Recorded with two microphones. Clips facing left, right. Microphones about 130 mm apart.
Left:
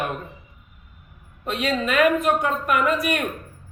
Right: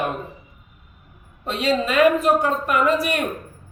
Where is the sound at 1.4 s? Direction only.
30° right (ahead or behind).